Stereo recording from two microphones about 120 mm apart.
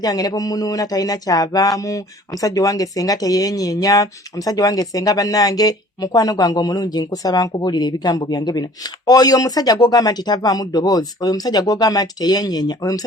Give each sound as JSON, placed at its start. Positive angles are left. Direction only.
{"t": 0.0, "sound": "speech", "side_deg": 30}